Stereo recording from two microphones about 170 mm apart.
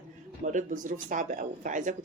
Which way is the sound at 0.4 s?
45° right (ahead or behind).